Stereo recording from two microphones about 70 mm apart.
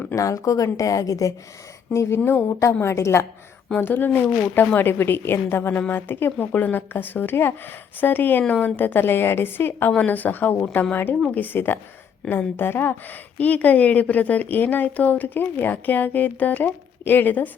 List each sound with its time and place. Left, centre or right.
0.2 s speech: left
1.9 s a woman's voice: left
3.8 s a woman's voice: left
9.9 s a woman's voice: left
12.2 s a woman's voice: centre
12.5 s a woman's voice: left